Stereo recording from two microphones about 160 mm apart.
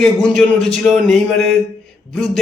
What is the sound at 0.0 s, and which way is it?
Speech, 5° left (ahead or behind).